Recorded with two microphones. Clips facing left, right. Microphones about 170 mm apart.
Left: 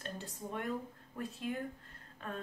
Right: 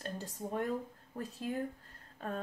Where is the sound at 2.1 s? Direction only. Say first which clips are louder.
Right 4 dB; 40° right (ahead or behind).